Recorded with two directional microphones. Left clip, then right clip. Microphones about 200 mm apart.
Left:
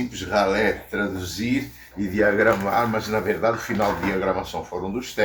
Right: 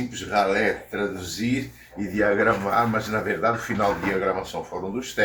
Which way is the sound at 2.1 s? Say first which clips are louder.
Left 2 dB; 20° left (ahead or behind).